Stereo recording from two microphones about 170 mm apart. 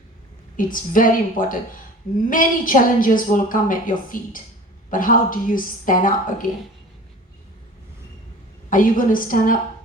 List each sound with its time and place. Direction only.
0.5 s a woman's voice: 55° left (ahead or behind)
8.7 s a woman's voice: 55° left (ahead or behind)